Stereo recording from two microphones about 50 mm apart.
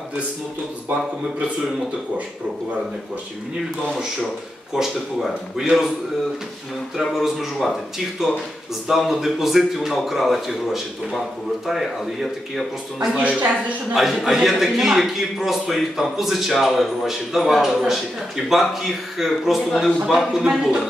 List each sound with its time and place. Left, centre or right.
5.6 s a man's voice: centre
7.0 s a man's voice: centre
13.1 s a woman's voice: right
13.9 s a man's voice: centre